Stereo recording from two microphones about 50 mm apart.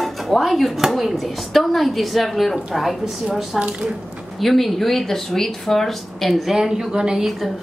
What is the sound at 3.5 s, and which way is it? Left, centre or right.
A woman's voice, centre.